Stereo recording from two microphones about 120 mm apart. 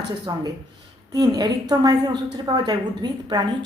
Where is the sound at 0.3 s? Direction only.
35° right (ahead or behind).